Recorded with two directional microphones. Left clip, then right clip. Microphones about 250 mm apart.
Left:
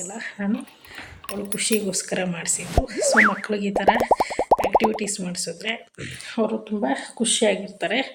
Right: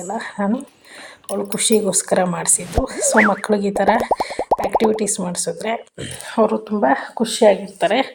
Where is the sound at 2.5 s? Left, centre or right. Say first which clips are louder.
Right 3 dB; centre.